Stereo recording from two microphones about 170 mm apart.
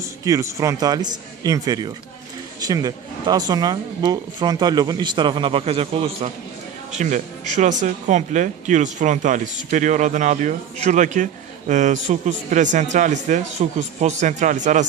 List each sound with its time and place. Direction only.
0.0 s speech: 20° right (ahead or behind); by 6.3 s 35° right (ahead or behind)
6.9 s speech: 45° right (ahead or behind)